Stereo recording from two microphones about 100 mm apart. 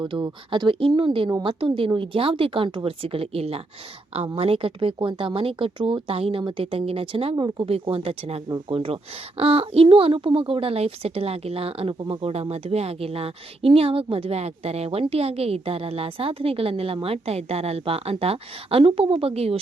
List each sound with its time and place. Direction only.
0.0 s speech: 50° right (ahead or behind); by 6.4 s 75° right (ahead or behind)
6.4 s speech: 60° right (ahead or behind)
7.7 s a woman's voice: 70° right (ahead or behind)
19.2 s speech: 85° right